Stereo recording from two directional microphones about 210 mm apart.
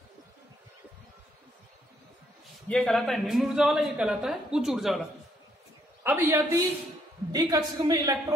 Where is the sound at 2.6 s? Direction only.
5° left (ahead or behind).